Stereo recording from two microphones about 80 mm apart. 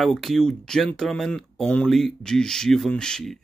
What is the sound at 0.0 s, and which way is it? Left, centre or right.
Speech, centre.